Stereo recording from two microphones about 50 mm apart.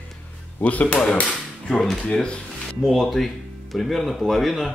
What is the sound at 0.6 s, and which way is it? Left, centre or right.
Speech, left.